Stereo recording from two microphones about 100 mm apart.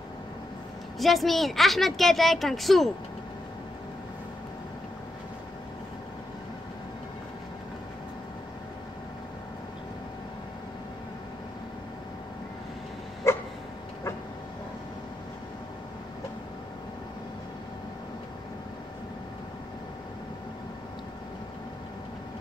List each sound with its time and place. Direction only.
0.9 s a woman's voice: centre (ahead or behind)
13.2 s dog: 30° left (ahead or behind)